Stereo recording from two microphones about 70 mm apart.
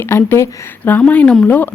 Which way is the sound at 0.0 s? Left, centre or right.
Left.